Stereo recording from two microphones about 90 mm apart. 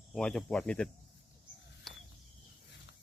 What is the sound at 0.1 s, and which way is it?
Speech, 5° left (ahead or behind).